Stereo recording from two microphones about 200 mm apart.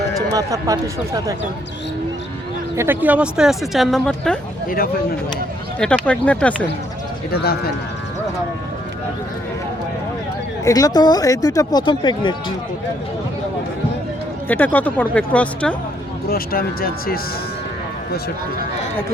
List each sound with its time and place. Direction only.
0.3 s speech: 15° right (ahead or behind)
2.7 s speech: 10° right (ahead or behind)
5.8 s speech: 5° left (ahead or behind)
7.3 s speech: 50° left (ahead or behind)
10.6 s speech: 15° left (ahead or behind)
14.4 s speech: 10° left (ahead or behind)
16.3 s speech: 50° left (ahead or behind)